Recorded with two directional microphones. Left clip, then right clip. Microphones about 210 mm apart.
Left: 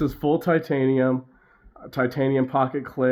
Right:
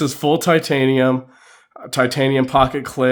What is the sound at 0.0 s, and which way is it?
Speech, 35° right (ahead or behind).